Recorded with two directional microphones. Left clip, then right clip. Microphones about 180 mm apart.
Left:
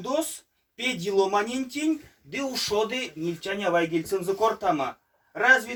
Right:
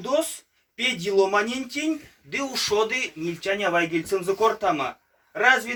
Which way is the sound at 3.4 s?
20° left (ahead or behind).